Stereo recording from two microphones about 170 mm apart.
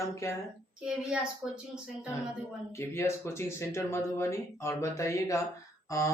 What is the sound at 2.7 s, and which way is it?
Speech, 15° left (ahead or behind).